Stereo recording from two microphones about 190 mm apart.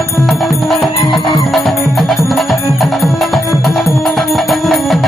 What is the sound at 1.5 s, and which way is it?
Music, centre (ahead or behind).